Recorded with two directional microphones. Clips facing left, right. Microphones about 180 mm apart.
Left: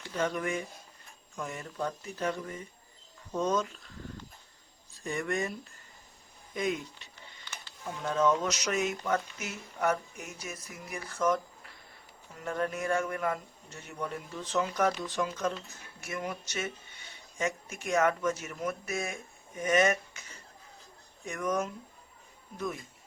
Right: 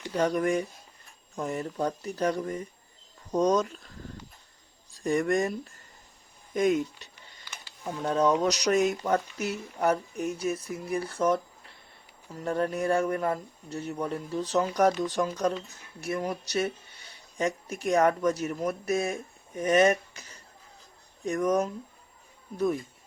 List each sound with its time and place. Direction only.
0.1 s speech: 40° right (ahead or behind)
4.9 s speech: 40° right (ahead or behind)
21.2 s speech: 35° right (ahead or behind)